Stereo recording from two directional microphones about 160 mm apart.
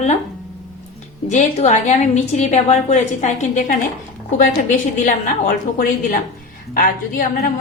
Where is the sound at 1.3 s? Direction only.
45° left (ahead or behind).